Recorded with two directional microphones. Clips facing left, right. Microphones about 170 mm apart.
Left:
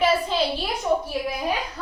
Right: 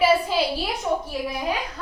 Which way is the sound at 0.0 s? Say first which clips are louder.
Right 2 dB; 5° right (ahead or behind).